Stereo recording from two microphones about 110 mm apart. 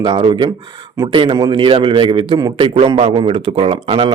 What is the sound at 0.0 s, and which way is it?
Speech, 45° right (ahead or behind).